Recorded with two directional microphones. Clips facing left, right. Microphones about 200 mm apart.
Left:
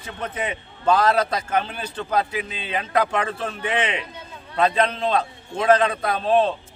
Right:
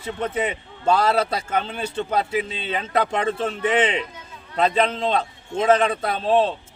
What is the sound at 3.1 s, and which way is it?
Speech, 25° right (ahead or behind).